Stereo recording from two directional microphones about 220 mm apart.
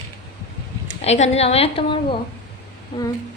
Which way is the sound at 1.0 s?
30° left (ahead or behind).